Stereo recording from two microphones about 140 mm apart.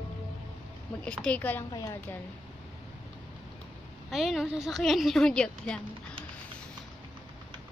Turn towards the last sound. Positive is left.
turn(degrees=5)  # may be behind; listen again after turning